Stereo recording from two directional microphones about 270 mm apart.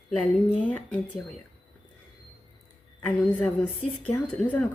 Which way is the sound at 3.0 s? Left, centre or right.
Centre.